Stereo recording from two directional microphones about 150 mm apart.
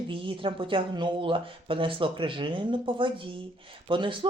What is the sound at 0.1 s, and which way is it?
Speech, 35° right (ahead or behind).